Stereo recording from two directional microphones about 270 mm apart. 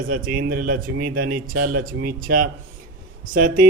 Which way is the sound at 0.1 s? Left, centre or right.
Right.